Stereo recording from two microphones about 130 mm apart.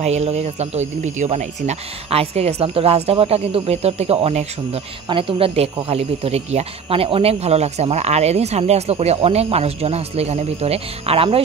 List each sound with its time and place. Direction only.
0.0 s speech: 55° right (ahead or behind)
5.0 s speech: 45° right (ahead or behind)